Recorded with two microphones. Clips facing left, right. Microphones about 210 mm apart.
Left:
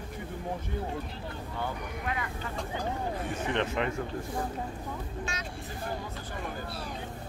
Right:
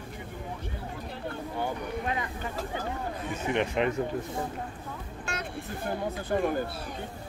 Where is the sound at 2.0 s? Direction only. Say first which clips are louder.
Even; 25° right (ahead or behind).